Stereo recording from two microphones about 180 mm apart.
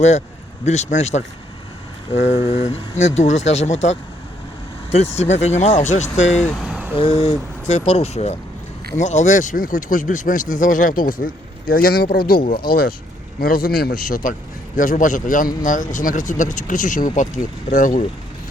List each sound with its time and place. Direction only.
0.6 s speech: 40° left (ahead or behind)
6.4 s vehicle: centre (ahead or behind)
6.9 s a man's voice: 30° left (ahead or behind); by 18.0 s 45° left (ahead or behind)